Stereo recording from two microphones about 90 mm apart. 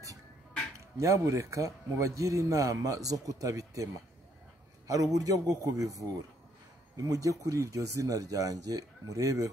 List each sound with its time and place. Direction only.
0.7 s speech: 35° right (ahead or behind)